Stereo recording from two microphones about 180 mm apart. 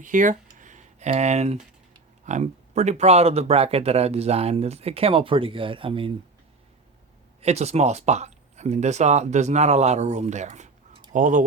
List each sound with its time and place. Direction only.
0.0 s speech: 45° right (ahead or behind); by 6.1 s 30° right (ahead or behind)
7.4 s speech: 35° right (ahead or behind)